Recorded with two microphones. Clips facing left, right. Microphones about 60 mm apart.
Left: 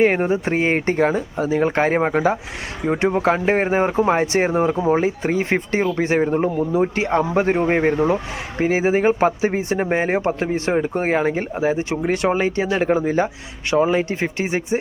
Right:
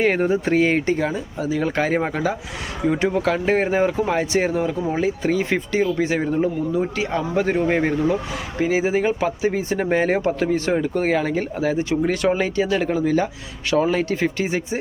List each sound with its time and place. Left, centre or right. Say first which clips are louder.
0.0 s speech: left 2 dB; centre
7.9 s speech: left 2 dB; left